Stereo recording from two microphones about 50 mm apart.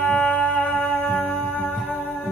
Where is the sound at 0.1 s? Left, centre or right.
Left.